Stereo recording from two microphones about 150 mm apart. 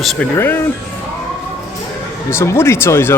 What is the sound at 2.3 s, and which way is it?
Speech, 20° left (ahead or behind).